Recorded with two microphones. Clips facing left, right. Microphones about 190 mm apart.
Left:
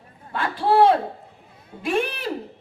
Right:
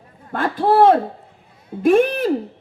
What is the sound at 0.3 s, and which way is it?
Speech, 50° right (ahead or behind).